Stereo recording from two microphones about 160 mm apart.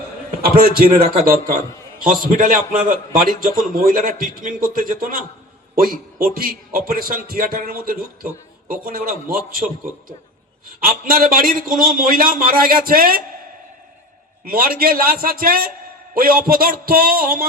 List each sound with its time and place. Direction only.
0.3 s a man's voice: 65° right (ahead or behind)
10.8 s a man's voice: 65° right (ahead or behind)
14.4 s a man's voice: 65° right (ahead or behind)